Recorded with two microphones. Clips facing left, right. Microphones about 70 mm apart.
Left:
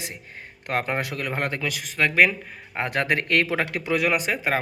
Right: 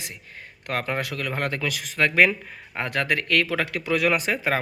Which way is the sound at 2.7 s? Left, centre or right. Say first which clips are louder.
Left 1 dB; centre.